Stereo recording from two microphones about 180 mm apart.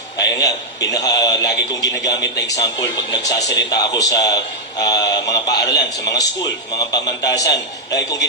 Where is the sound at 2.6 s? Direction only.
20° left (ahead or behind).